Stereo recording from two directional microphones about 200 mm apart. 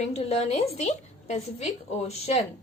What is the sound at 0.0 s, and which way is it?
A woman's voice, 35° left (ahead or behind).